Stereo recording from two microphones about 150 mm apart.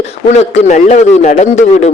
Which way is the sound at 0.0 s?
45° left (ahead or behind).